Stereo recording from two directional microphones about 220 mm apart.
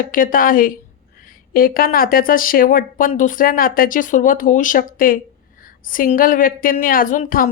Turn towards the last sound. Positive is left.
turn(degrees=40)  # may be behind; listen again after turning